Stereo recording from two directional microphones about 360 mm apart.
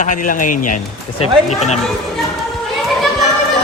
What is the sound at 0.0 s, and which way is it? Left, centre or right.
Speech, left.